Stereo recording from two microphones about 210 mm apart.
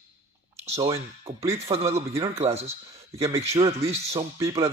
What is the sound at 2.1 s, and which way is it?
Speech, 15° right (ahead or behind).